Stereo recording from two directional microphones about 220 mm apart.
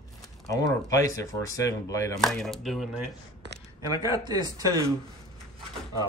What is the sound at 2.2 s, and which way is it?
Speech, centre (ahead or behind).